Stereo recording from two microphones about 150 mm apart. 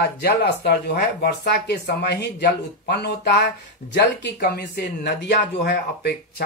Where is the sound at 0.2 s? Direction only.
90° left.